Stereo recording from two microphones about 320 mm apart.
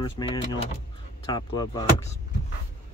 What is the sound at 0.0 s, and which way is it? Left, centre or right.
Speech, centre.